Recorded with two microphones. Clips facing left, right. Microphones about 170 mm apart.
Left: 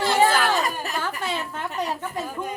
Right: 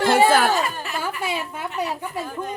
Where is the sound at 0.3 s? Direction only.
50° right (ahead or behind).